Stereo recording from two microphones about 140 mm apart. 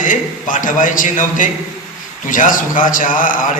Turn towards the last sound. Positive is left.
turn(degrees=75)  # may be behind; listen again after turning